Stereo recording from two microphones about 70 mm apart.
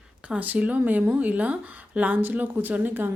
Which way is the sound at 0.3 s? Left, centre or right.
Right.